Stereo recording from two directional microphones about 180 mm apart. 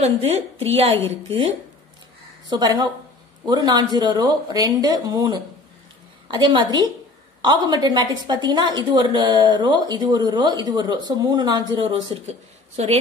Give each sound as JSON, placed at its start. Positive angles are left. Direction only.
{"t": 0.0, "sound": "a woman's voice", "side_deg": -35}
{"t": 2.5, "sound": "a woman's voice", "side_deg": -20}